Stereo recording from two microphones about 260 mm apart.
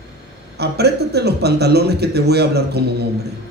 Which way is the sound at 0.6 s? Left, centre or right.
Right.